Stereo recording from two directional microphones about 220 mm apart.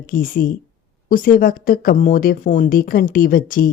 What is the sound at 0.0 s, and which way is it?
Speech, 40° left (ahead or behind).